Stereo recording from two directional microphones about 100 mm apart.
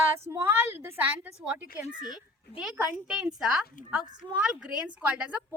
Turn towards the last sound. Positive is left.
turn(degrees=-15)  # may be behind; listen again after turning